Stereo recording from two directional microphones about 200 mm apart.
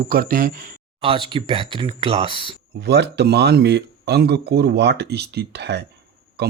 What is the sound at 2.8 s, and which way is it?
Speech, 55° right (ahead or behind).